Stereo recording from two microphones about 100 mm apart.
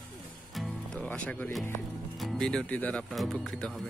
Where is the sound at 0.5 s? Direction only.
10° left (ahead or behind).